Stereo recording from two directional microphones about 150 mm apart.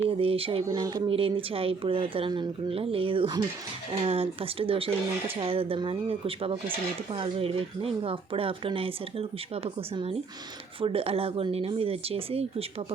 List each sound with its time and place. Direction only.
0.1 s speech: 40° right (ahead or behind)